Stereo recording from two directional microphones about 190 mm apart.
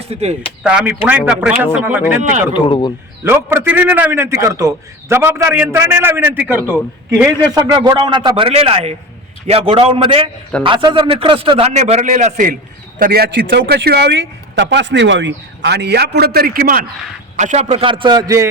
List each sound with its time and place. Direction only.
0.0 s speech: 35° right (ahead or behind)
0.6 s a man's voice: 5° right (ahead or behind)
2.5 s speech: 25° left (ahead or behind)
3.2 s a man's voice: 10° right (ahead or behind); by 16.8 s 50° right (ahead or behind)
17.3 s a man's voice: 40° right (ahead or behind); by 18.4 s 20° right (ahead or behind)